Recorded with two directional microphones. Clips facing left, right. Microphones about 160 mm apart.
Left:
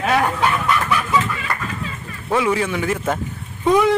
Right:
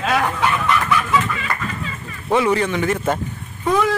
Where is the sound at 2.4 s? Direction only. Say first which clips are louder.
Right 1 dB; 5° left (ahead or behind).